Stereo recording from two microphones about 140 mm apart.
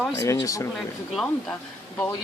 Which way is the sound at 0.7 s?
Centre (ahead or behind).